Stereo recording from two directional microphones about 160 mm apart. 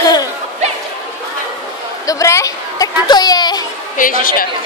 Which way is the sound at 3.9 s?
60° left (ahead or behind).